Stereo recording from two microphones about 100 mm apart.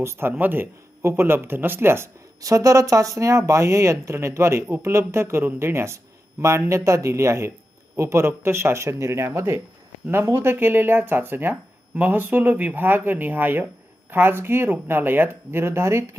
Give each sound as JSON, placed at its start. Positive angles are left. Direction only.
{"t": 0.0, "sound": "speech", "side_deg": -25}